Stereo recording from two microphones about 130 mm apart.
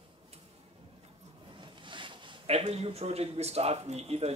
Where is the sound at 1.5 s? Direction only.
40° right (ahead or behind).